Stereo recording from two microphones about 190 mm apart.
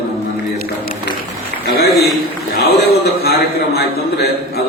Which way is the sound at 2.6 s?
55° left (ahead or behind).